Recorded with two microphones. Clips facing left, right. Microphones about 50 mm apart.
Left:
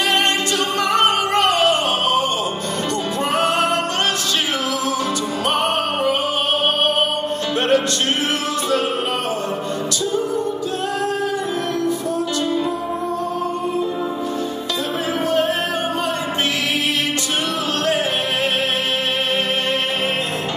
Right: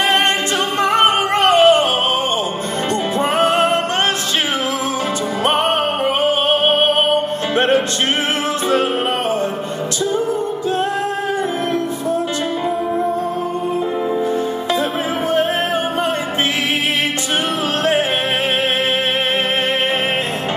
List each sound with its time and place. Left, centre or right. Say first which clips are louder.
0.8 s music: right 3 dB; right
3.3 s music: right 3 dB; right
7.5 s music: right 2 dB; right